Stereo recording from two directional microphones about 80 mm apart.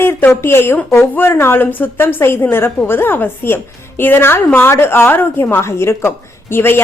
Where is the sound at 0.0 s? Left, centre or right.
Left.